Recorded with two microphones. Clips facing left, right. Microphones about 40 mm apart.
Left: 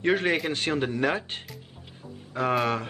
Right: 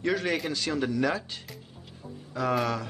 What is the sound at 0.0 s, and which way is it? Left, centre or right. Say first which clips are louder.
A man's voice: left 4 dB; left.